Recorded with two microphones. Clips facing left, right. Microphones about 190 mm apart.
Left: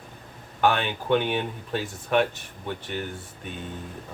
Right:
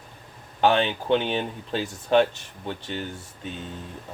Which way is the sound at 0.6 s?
30° right (ahead or behind).